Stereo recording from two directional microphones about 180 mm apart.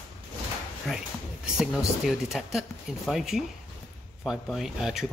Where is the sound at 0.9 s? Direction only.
Centre (ahead or behind).